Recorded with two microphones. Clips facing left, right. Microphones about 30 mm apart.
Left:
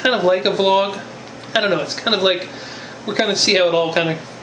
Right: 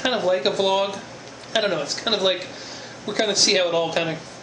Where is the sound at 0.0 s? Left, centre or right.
Left.